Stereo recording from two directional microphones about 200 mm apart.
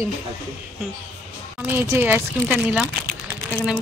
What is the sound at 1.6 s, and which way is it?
A woman's voice, 10° right (ahead or behind).